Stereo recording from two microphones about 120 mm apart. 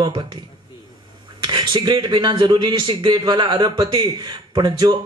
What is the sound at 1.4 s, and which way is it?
A man's voice, 40° right (ahead or behind).